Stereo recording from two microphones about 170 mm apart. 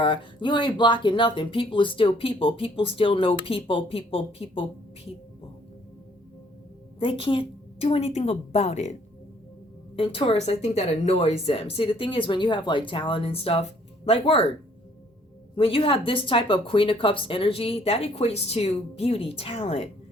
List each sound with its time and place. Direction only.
0.0 s speech: 30° left (ahead or behind)
7.0 s speech: 30° left (ahead or behind)
9.9 s speech: 30° left (ahead or behind)
15.5 s speech: 35° left (ahead or behind)